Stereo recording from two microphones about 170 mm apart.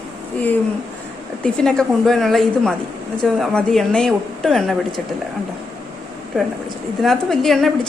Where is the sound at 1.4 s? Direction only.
5° left (ahead or behind).